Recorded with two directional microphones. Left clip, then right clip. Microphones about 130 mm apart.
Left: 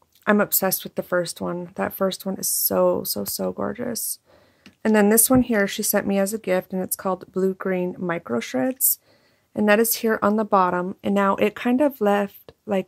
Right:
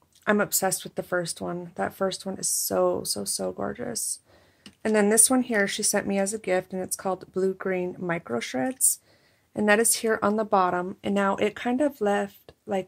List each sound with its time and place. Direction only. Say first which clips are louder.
0.2 s speech: left 3 dB; 40° left (ahead or behind)